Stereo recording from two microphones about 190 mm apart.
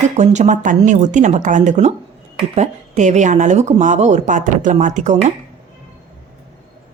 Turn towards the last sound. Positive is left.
turn(degrees=-40)  # may be behind; listen again after turning